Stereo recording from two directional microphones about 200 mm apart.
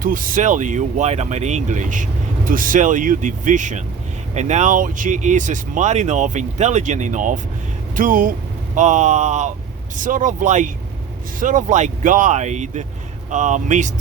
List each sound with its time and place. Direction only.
0.0 s speech: 45° right (ahead or behind)